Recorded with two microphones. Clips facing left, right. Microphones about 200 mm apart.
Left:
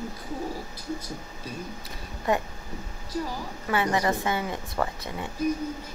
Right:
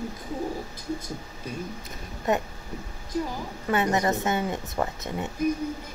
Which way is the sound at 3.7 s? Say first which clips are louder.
Right 1 dB; 25° right (ahead or behind).